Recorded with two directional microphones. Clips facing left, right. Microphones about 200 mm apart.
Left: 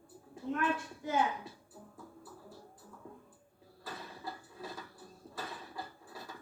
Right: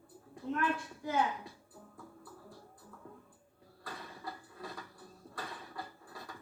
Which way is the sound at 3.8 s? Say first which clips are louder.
Left 1 dB; centre (ahead or behind).